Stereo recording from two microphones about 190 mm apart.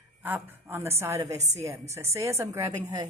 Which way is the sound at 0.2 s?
10° right (ahead or behind).